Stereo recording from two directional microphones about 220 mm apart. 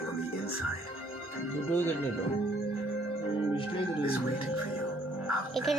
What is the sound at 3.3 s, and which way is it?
Organ, 25° left (ahead or behind).